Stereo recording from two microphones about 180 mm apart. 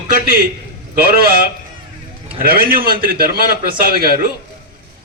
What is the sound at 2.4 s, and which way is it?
A man's voice, 55° right (ahead or behind).